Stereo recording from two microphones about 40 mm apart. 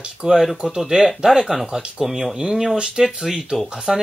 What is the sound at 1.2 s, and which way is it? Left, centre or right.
Speech, centre.